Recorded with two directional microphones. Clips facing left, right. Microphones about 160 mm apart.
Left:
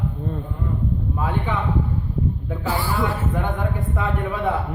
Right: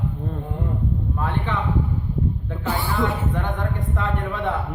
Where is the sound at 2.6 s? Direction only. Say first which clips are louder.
Left 1 dB; 20° right (ahead or behind).